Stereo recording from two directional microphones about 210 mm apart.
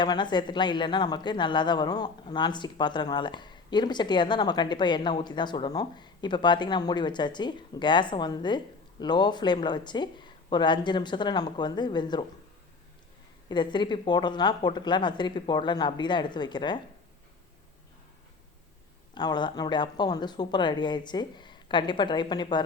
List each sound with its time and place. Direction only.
0.0 s speech: 20° left (ahead or behind)
13.5 s speech: 20° left (ahead or behind)
19.1 s speech: 20° left (ahead or behind)